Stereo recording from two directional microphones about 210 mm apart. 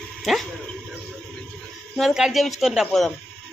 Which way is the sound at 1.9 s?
Centre (ahead or behind).